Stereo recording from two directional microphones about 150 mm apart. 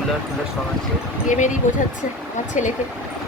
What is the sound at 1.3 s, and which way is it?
Speech, 55° left (ahead or behind).